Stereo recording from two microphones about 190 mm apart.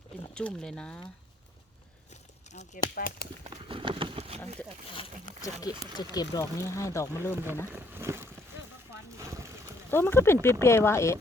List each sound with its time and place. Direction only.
0.3 s speech: 5° left (ahead or behind)
2.5 s speech: 40° left (ahead or behind)
2.9 s speech: 55° left (ahead or behind)
3.4 s speech: 25° right (ahead or behind)
4.9 s speech: 25° left (ahead or behind)
7.3 s speech: 10° right (ahead or behind)
9.9 s speech: 10° left (ahead or behind)